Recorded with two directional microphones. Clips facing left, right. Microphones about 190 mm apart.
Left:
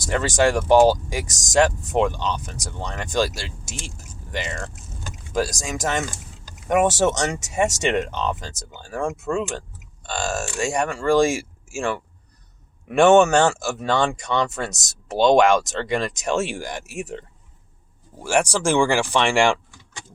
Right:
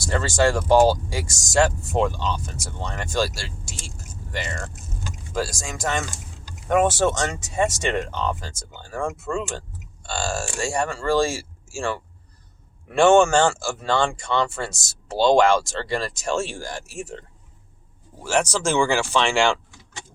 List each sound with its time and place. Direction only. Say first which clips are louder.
0.0 s speech: left 1 dB; 15° left (ahead or behind)
9.2 s speech: left 3 dB; centre (ahead or behind)
10.1 s speech: left 1 dB; 20° left (ahead or behind)
18.2 s speech: left 2 dB; 10° left (ahead or behind)